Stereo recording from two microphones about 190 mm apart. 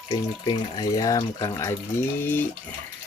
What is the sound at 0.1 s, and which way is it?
Speech, 20° left (ahead or behind).